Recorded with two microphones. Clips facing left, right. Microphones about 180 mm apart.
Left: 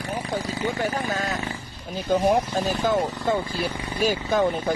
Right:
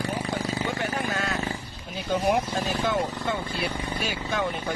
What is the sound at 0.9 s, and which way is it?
Vehicle, 35° left (ahead or behind).